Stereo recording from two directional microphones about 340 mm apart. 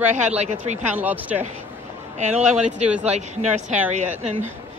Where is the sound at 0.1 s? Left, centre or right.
Centre.